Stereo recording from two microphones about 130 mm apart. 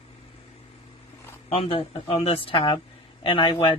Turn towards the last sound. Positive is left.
turn(degrees=40)  # may be behind; listen again after turning